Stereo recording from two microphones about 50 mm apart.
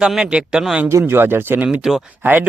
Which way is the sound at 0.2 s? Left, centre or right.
Centre.